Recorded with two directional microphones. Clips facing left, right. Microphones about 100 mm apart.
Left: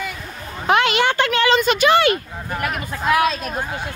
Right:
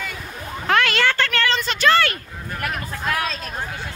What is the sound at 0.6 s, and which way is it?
A woman's voice, 20° left (ahead or behind).